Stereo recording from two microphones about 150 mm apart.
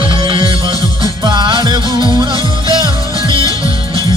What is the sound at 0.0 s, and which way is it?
Music, 35° right (ahead or behind).